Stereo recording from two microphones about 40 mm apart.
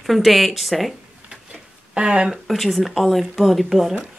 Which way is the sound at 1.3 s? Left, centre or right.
Centre.